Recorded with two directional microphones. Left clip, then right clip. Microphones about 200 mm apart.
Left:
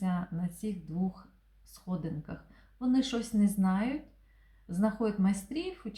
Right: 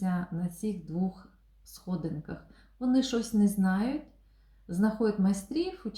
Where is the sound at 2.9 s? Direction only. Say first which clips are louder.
Right 2 dB; 15° left (ahead or behind).